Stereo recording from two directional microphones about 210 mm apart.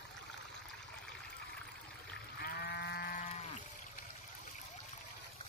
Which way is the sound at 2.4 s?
45° left (ahead or behind).